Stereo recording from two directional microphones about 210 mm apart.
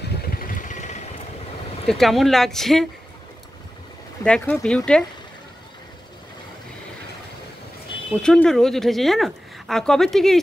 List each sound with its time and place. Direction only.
0.2 s vehicle: 45° left (ahead or behind)
1.9 s speech: centre (ahead or behind)
4.2 s speech: 5° left (ahead or behind)
8.1 s speech: 5° left (ahead or behind)